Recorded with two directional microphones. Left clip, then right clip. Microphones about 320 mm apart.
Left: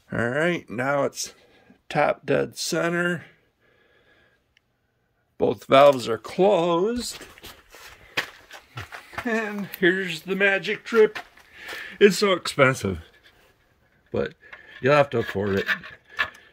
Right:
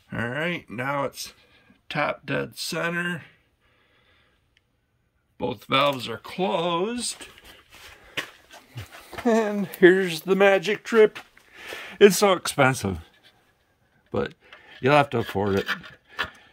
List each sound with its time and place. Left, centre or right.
0.1 s speech: centre
5.4 s speech: centre
9.2 s speech: centre
14.1 s speech: centre